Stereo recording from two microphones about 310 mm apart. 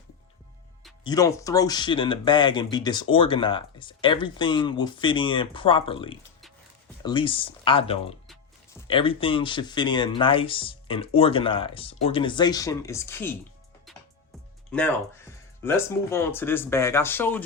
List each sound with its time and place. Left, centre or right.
1.0 s speech: centre
13.9 s music: centre
14.7 s speech: centre